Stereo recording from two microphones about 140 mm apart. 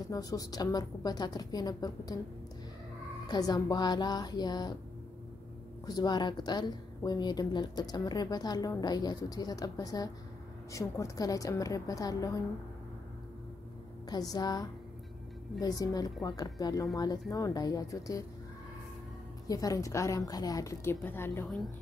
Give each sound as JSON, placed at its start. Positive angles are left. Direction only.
{"t": 0.1, "sound": "a woman's voice", "side_deg": 25}
{"t": 3.3, "sound": "a woman's voice", "side_deg": 25}
{"t": 5.9, "sound": "a woman's voice", "side_deg": 30}
{"t": 14.0, "sound": "a woman's voice", "side_deg": 25}
{"t": 19.4, "sound": "a woman's voice", "side_deg": 25}